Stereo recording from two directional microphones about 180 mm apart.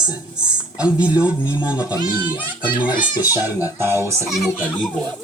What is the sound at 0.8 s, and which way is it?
A child's voice, 5° right (ahead or behind).